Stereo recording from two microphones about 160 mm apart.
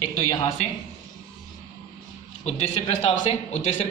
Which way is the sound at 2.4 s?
40° left (ahead or behind).